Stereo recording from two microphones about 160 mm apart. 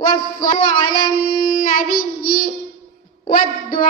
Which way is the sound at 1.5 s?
65° left (ahead or behind).